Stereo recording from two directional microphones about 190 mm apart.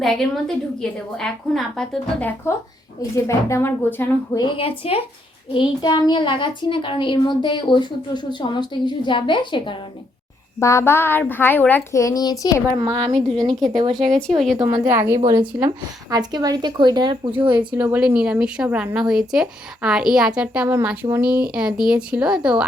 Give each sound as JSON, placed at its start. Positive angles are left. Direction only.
{"t": 0.0, "sound": "speech", "side_deg": 0}
{"t": 3.2, "sound": "a woman's voice", "side_deg": 15}
{"t": 4.4, "sound": "a woman's voice", "side_deg": 25}
{"t": 10.6, "sound": "a woman's voice", "side_deg": 15}
{"t": 12.7, "sound": "a woman's voice", "side_deg": -20}
{"t": 13.1, "sound": "speech", "side_deg": 0}
{"t": 14.8, "sound": "a woman's voice", "side_deg": -15}
{"t": 17.6, "sound": "speech", "side_deg": -10}